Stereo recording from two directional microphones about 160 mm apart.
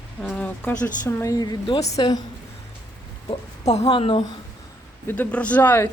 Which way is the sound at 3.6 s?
40° left (ahead or behind).